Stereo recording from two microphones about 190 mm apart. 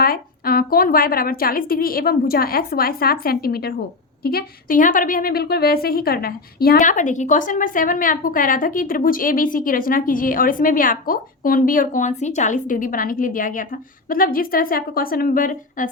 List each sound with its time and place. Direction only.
0.0 s a woman's voice: 50° left (ahead or behind)